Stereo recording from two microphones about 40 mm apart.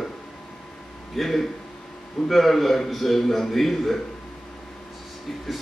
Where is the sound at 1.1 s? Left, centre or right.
Centre.